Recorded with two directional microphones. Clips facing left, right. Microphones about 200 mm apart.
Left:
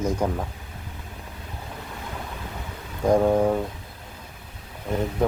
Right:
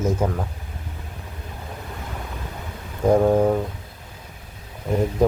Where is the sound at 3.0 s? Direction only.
5° right (ahead or behind).